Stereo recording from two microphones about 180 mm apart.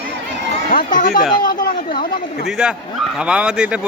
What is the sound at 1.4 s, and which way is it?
Chatter, 55° left (ahead or behind).